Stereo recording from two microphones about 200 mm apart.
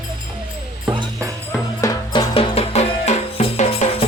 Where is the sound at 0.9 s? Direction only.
20° right (ahead or behind).